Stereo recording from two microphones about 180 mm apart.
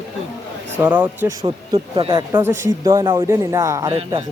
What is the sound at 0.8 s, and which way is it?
Speech, 10° right (ahead or behind).